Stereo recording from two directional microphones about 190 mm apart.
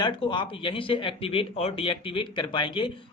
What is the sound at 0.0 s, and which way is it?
Speech, 25° left (ahead or behind).